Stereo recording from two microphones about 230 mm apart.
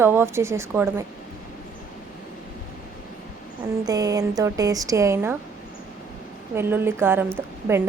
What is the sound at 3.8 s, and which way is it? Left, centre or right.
A woman's voice, centre.